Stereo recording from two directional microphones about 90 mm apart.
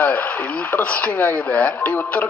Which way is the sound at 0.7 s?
20° left (ahead or behind).